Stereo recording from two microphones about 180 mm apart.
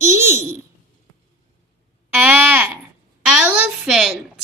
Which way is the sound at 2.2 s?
10° right (ahead or behind).